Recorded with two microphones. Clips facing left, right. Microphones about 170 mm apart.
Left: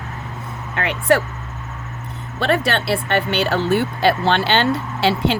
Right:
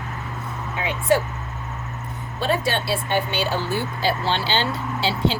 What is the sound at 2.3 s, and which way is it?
Speech, 65° left (ahead or behind).